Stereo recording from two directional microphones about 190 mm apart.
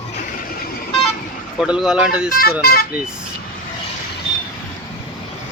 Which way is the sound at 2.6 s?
55° left (ahead or behind).